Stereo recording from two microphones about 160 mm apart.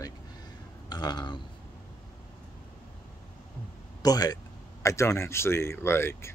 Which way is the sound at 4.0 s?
25° left (ahead or behind).